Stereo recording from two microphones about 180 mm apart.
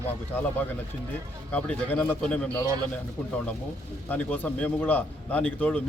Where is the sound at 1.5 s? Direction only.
10° left (ahead or behind).